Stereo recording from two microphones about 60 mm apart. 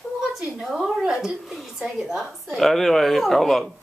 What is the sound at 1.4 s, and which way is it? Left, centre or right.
A woman's voice, centre.